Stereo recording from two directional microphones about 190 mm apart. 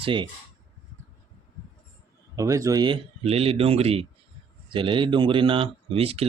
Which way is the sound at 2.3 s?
15° right (ahead or behind).